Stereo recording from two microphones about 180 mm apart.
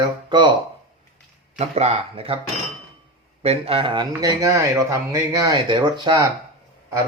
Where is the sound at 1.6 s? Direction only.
35° right (ahead or behind).